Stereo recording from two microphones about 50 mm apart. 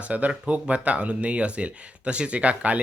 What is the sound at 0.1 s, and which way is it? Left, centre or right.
Speech, right.